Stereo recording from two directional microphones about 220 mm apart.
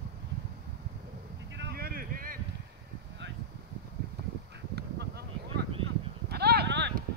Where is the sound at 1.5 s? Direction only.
50° right (ahead or behind).